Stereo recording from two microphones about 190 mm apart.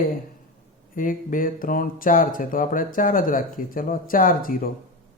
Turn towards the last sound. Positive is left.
turn(degrees=45)  # may be behind; listen again after turning